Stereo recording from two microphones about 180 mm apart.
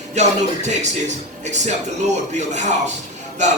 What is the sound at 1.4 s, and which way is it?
A man's voice, 40° right (ahead or behind).